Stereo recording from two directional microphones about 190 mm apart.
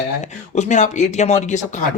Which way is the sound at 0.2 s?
40° left (ahead or behind).